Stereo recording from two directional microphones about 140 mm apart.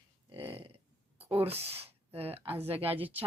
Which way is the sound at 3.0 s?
10° right (ahead or behind).